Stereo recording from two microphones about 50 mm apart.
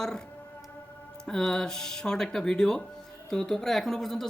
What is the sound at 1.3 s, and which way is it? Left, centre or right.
A woman's voice, centre.